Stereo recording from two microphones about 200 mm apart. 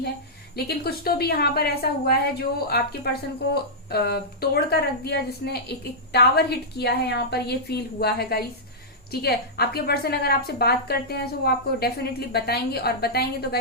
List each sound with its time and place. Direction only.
0.5 s a woman's voice: 50° left (ahead or behind)